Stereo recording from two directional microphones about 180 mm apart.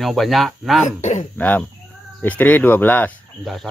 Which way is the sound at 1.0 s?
40° left (ahead or behind).